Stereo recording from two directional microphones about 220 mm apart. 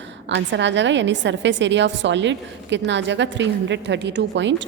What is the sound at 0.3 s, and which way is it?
A woman's voice, 55° right (ahead or behind).